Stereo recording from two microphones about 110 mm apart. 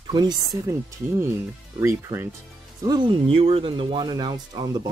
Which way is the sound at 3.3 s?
55° right (ahead or behind).